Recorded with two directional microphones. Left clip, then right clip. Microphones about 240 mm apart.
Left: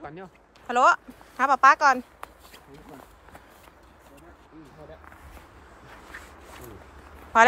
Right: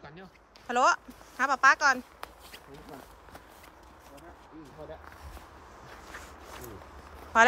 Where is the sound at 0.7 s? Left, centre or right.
Centre.